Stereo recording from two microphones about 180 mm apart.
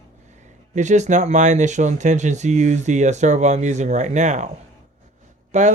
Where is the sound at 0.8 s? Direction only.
40° right (ahead or behind).